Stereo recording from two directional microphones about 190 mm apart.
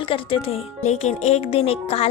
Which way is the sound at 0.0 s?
30° left (ahead or behind).